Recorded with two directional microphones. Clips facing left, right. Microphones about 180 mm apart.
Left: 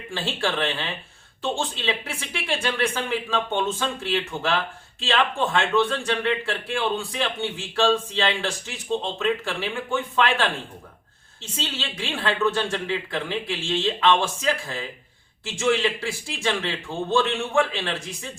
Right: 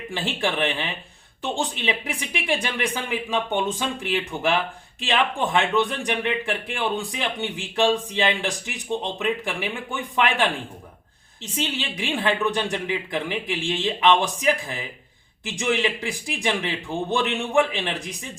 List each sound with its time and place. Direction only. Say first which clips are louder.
0.1 s speech: even; 15° right (ahead or behind)